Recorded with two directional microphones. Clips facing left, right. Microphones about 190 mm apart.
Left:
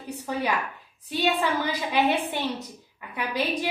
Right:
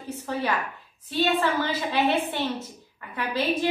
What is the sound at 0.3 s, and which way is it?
A woman's voice, 15° left (ahead or behind).